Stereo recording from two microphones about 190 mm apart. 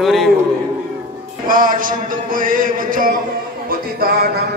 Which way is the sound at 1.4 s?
45° right (ahead or behind).